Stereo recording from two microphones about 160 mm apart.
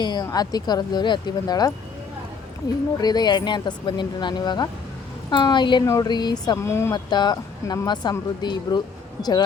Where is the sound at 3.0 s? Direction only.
25° left (ahead or behind).